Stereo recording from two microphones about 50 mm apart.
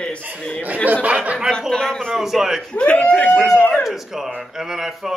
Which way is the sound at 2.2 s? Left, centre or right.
Centre.